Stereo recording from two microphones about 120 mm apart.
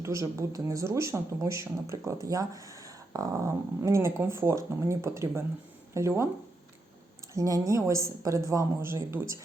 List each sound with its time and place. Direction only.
0.0 s speech: 25° right (ahead or behind)
7.3 s speech: 30° right (ahead or behind)